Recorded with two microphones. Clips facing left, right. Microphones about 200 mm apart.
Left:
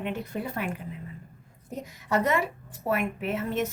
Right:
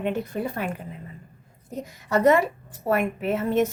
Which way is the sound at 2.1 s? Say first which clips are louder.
Right 7 dB; 40° right (ahead or behind).